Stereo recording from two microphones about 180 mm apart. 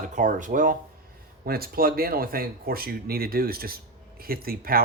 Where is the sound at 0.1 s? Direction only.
45° right (ahead or behind).